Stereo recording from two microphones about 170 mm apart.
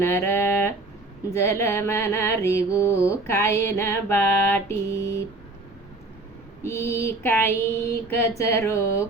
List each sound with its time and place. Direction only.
0.0 s a sound: 15° left (ahead or behind)
1.3 s mantra: 15° left (ahead or behind)
6.6 s mantra: 15° left (ahead or behind)